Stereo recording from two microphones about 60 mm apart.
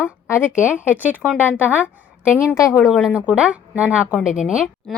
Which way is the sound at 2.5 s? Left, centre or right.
Left.